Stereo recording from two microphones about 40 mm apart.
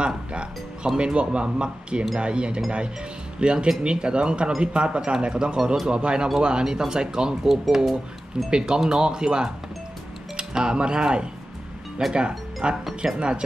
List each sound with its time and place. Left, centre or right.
0.0 s speech: right; by 8.5 s centre
8.5 s speech: centre
13.0 s speech: centre